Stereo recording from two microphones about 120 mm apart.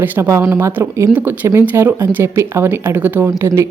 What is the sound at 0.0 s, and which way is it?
Speech, 20° right (ahead or behind).